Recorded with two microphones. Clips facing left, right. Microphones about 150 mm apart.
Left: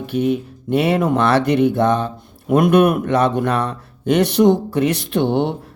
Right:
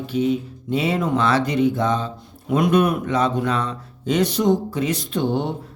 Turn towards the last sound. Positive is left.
turn(degrees=70)  # may be behind; listen again after turning